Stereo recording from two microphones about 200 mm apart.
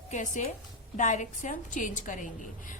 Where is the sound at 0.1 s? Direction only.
40° left (ahead or behind).